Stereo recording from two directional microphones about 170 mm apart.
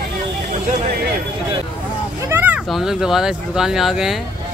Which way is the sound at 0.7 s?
55° right (ahead or behind).